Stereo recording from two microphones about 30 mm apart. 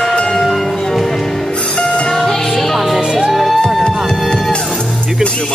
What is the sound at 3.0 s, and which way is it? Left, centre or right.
Music, right.